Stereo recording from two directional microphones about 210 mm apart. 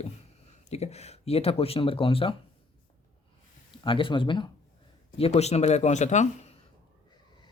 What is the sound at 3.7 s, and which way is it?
Speech, 25° left (ahead or behind).